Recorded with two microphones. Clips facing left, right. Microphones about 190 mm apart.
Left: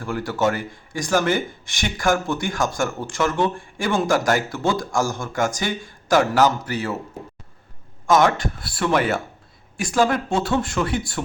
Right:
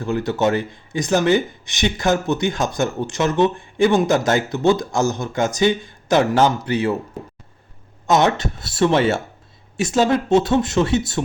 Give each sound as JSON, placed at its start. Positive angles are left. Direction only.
{"t": 0.0, "sound": "speech", "side_deg": -20}
{"t": 8.0, "sound": "speech", "side_deg": -25}